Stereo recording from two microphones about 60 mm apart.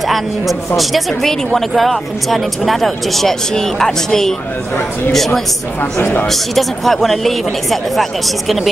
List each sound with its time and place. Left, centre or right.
0.7 s speech: centre
5.9 s a man's voice: left
6.2 s speech: centre